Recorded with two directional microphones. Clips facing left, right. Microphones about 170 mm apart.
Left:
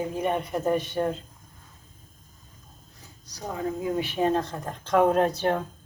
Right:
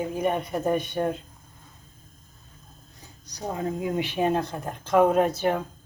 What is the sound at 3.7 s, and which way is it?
Speech, 20° right (ahead or behind).